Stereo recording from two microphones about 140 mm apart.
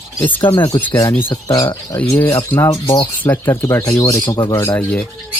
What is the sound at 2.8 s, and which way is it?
Speech, 35° left (ahead or behind).